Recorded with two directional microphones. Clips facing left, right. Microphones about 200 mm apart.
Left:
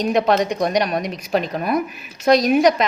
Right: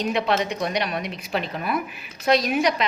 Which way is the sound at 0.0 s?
45° left (ahead or behind).